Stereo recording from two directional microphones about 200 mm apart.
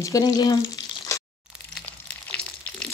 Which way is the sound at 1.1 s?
15° left (ahead or behind).